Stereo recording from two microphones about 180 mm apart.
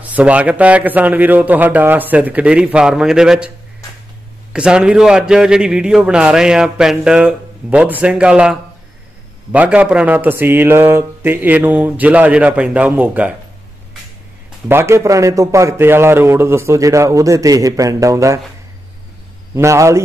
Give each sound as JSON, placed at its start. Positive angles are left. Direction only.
{"t": 0.0, "sound": "a man's voice", "side_deg": -10}
{"t": 14.7, "sound": "speech", "side_deg": -15}
{"t": 19.5, "sound": "speech", "side_deg": -15}